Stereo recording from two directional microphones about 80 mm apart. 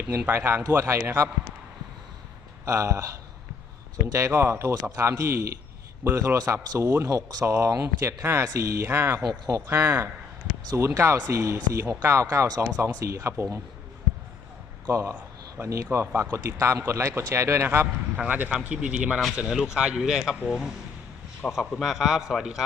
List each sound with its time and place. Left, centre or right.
0.3 s a man's voice: right
2.6 s speech: right
4.0 s speech: right
8.9 s a man's voice: right
9.2 s speech: right
9.6 s a man's voice: right
10.8 s speech: right
14.8 s speech: right
18.2 s a man's voice: centre